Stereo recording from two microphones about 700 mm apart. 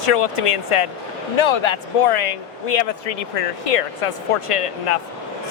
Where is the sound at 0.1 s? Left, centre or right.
Left.